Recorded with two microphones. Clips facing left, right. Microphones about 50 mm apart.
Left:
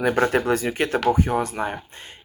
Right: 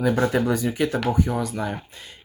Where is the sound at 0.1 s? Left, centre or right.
Left.